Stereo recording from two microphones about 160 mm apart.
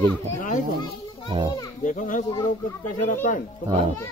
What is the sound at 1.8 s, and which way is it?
Speech, 55° left (ahead or behind).